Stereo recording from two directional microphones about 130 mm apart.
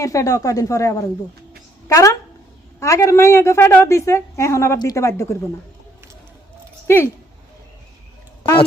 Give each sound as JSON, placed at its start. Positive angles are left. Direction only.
{"t": 0.0, "sound": "a woman's voice", "side_deg": 25}
{"t": 6.8, "sound": "speech", "side_deg": 20}